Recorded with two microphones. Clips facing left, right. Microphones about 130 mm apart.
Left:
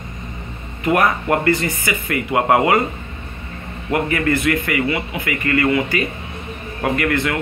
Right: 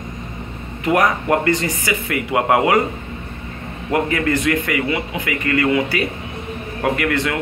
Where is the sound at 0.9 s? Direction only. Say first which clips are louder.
Right 1 dB; 15° right (ahead or behind).